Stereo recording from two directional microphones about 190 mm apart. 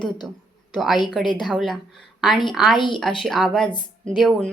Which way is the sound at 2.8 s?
25° left (ahead or behind).